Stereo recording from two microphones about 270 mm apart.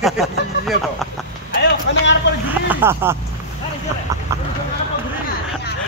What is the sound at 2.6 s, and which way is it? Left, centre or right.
Speech, centre.